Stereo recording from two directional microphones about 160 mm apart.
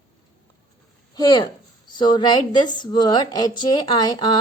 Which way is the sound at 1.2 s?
25° left (ahead or behind).